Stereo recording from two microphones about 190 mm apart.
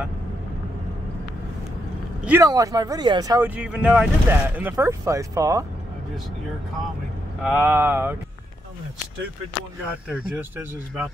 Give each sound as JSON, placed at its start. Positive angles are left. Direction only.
{"t": 2.2, "sound": "speech", "side_deg": -15}
{"t": 7.4, "sound": "speech", "side_deg": -10}
{"t": 10.0, "sound": "speech", "side_deg": -5}